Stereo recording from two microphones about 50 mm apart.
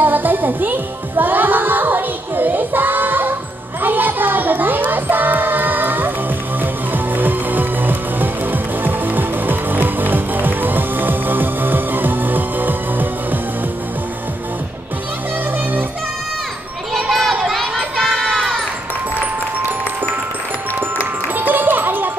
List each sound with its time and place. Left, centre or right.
0.0 s music: right
16.9 s children playing: centre
17.6 s a sound: centre
18.0 s crowd: centre
21.4 s music: right